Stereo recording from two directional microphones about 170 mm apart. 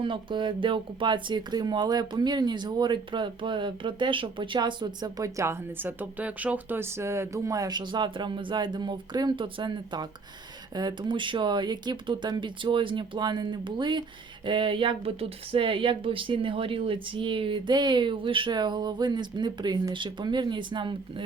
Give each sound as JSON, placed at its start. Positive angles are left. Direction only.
{"t": 0.0, "sound": "speech", "side_deg": -30}